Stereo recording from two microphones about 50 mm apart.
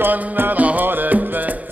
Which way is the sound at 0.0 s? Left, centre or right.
Right.